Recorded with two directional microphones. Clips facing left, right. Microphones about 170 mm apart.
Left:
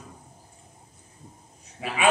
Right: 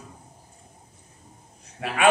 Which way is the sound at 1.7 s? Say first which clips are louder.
Right 2 dB; centre (ahead or behind).